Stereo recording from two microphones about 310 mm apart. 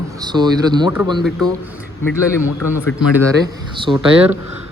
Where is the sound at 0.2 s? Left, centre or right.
Centre.